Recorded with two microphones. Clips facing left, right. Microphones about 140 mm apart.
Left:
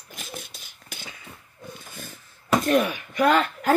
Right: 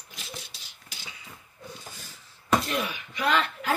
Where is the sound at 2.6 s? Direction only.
50° left (ahead or behind).